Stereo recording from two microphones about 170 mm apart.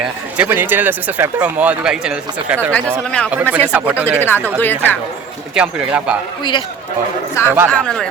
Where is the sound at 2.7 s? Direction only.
10° left (ahead or behind).